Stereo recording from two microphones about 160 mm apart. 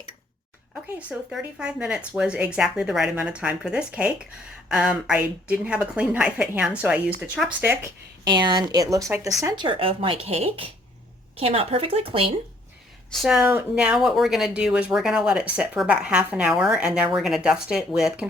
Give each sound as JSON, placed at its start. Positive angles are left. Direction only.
{"t": 0.7, "sound": "a woman's voice", "side_deg": -5}
{"t": 8.4, "sound": "a woman's voice", "side_deg": -25}
{"t": 13.2, "sound": "speech", "side_deg": -5}